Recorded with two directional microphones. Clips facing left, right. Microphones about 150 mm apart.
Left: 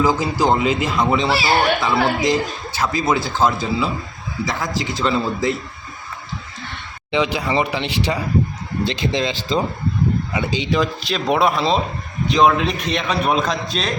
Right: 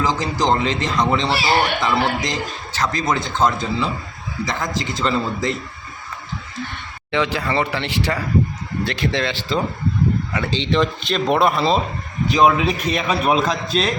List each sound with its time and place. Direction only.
0.0 s a man's voice: 10° left (ahead or behind)
7.1 s speech: 15° left (ahead or behind)
10.3 s a man's voice: 15° left (ahead or behind); by 13.9 s centre (ahead or behind)